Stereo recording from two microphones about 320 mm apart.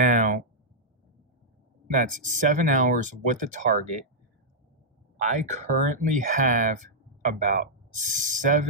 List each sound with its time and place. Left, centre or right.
0.0 s a sound: right
1.9 s speech: right
5.1 s speech: right